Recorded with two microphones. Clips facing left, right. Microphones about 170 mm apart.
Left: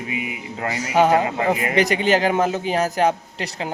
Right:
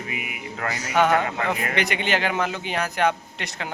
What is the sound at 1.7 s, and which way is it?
A man's voice, 40° left (ahead or behind).